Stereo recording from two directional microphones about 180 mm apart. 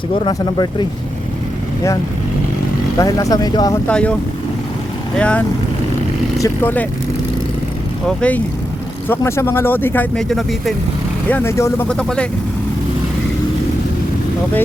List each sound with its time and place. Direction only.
0.1 s speech: 25° left (ahead or behind)
3.0 s speech: 20° left (ahead or behind)
3.8 s speech: 5° left (ahead or behind)
5.1 s speech: 5° left (ahead or behind)
8.0 s speech: 5° left (ahead or behind)
11.3 s speech: 10° left (ahead or behind)
11.9 s speech: 5° left (ahead or behind)